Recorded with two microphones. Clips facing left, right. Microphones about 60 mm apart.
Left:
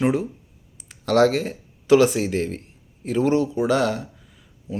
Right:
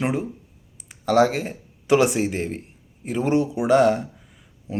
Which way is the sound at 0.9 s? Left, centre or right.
Centre.